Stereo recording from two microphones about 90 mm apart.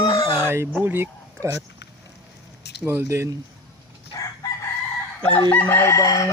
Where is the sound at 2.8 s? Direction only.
25° right (ahead or behind).